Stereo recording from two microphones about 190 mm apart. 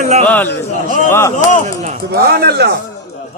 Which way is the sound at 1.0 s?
15° left (ahead or behind).